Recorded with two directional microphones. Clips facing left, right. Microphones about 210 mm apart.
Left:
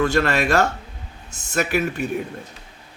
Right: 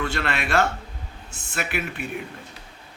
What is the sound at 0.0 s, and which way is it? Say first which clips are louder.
A man's voice: left 8 dB; 45° left (ahead or behind).